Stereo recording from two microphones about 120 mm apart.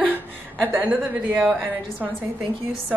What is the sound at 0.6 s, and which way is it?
Speech, 20° right (ahead or behind).